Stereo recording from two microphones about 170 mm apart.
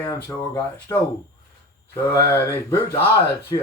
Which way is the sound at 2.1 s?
15° left (ahead or behind).